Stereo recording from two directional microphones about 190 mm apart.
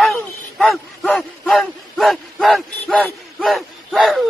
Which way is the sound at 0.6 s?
Centre (ahead or behind).